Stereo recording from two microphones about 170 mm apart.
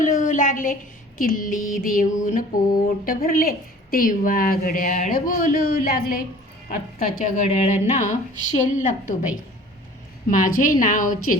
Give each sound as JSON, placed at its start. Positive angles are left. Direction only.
{"t": 0.0, "sound": "a sound", "side_deg": 50}
{"t": 1.2, "sound": "mantra", "side_deg": 55}
{"t": 7.0, "sound": "a woman's voice", "side_deg": 50}
{"t": 10.2, "sound": "a woman's voice", "side_deg": 50}